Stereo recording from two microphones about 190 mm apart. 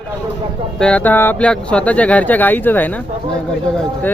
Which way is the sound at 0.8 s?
5° left (ahead or behind).